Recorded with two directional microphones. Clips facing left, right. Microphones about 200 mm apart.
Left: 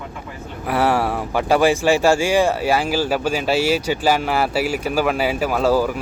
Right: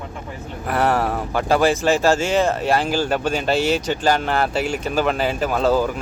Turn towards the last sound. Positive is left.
turn(degrees=5)  # may be behind; listen again after turning